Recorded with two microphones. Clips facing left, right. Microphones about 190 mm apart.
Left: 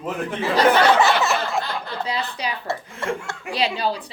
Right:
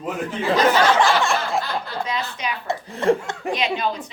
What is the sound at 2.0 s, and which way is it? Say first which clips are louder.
A woman's voice: even; 35° left (ahead or behind).